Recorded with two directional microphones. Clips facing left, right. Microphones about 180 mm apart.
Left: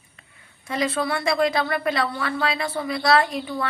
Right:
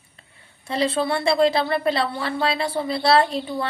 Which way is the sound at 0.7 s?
30° right (ahead or behind).